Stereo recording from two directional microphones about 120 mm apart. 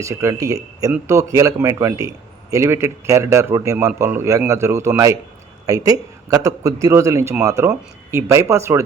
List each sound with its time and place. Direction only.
0.0 s a man's voice: 25° right (ahead or behind)